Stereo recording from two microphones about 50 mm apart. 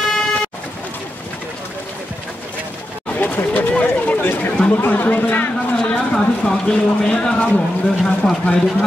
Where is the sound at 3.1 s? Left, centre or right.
Left.